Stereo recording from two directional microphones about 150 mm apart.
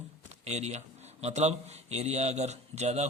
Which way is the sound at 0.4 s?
45° right (ahead or behind).